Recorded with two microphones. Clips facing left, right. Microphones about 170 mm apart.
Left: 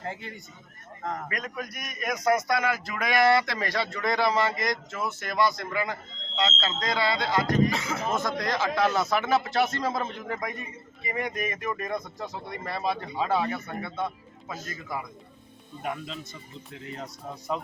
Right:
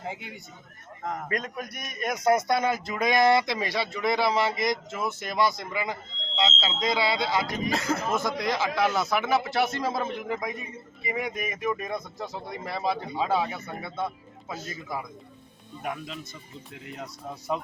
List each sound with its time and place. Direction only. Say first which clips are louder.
0.0 s speech: even; 10° right (ahead or behind)
1.3 s speech: right 3 dB; 25° right (ahead or behind); by 7.7 s 10° right (ahead or behind)
7.7 s speech: right 3 dB; 40° right (ahead or behind)
8.1 s speech: right 1 dB; 5° right (ahead or behind)
15.8 s speech: even; 5° right (ahead or behind)